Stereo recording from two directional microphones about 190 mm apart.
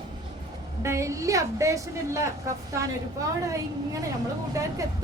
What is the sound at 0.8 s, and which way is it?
A woman's voice, 15° right (ahead or behind).